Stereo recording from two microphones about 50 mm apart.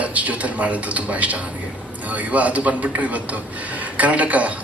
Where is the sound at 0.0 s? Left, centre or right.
Right.